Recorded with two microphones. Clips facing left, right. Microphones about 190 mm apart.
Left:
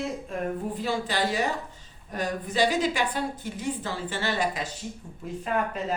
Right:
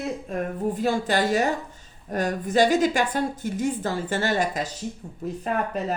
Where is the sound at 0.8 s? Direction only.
45° right (ahead or behind).